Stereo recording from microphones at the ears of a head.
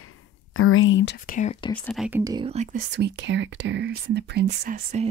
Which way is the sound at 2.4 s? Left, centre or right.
Right.